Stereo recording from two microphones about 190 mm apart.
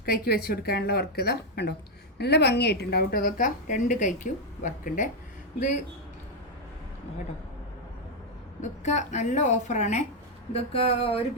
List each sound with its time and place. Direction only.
0.0 s a woman's voice: 55° left (ahead or behind)
8.6 s a woman's voice: 40° left (ahead or behind)